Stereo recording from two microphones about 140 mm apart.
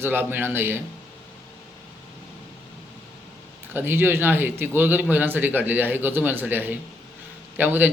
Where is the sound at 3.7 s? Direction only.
15° right (ahead or behind).